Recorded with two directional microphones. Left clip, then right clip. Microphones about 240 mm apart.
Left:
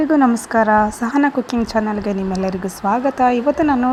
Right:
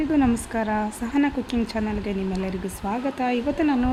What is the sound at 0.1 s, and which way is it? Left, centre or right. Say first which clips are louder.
Speech: left 8 dB; centre.